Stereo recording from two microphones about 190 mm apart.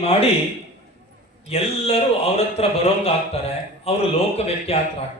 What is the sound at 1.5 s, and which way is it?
A man's voice, 30° left (ahead or behind).